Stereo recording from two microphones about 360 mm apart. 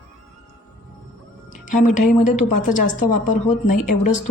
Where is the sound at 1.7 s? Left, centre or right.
Centre.